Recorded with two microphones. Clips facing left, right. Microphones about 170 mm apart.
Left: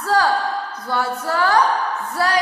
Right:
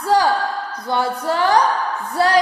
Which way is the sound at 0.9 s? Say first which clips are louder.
Right 3 dB; 20° right (ahead or behind).